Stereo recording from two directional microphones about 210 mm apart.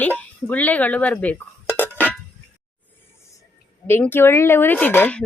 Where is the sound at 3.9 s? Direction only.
10° left (ahead or behind).